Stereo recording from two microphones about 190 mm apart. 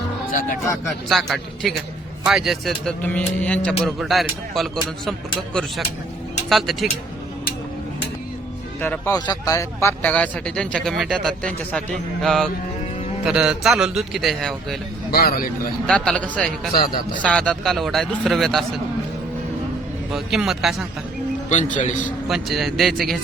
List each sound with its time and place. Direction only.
0.3 s speech: 45° left (ahead or behind)
1.0 s a man's voice: centre (ahead or behind)
6.5 s a man's voice: centre (ahead or behind)
8.8 s a man's voice: 10° left (ahead or behind)
15.1 s speech: 50° left (ahead or behind)
15.9 s speech: 5° left (ahead or behind)
16.7 s speech: 50° left (ahead or behind)
17.2 s a man's voice: 5° left (ahead or behind)
20.1 s a man's voice: centre (ahead or behind)
21.5 s a man's voice: 40° left (ahead or behind)
22.3 s a man's voice: centre (ahead or behind)